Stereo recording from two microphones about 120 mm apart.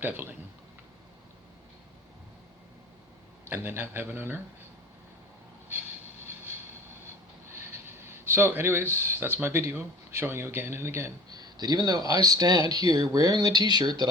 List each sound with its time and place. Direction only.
0.0 s a man's voice: 15° right (ahead or behind)
3.5 s a man's voice: 15° right (ahead or behind)
7.5 s speech: 20° right (ahead or behind)
11.3 s speech: 35° right (ahead or behind)